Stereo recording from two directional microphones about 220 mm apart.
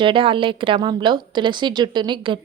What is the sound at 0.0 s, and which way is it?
A woman's voice, 25° right (ahead or behind).